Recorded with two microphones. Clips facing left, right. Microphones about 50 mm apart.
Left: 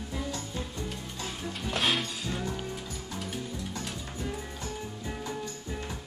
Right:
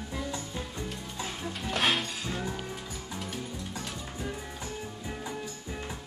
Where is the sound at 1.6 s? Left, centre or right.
Centre.